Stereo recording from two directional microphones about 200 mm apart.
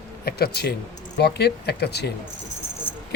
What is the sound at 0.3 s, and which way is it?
Speech, 50° left (ahead or behind).